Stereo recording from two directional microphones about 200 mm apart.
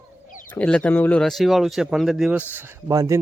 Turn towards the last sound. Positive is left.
turn(degrees=-15)  # may be behind; listen again after turning